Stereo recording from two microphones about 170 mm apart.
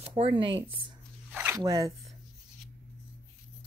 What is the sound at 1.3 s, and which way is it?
Squish, 10° right (ahead or behind).